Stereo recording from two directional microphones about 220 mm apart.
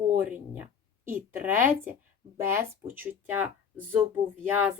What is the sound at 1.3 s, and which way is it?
A woman's voice, 10° right (ahead or behind).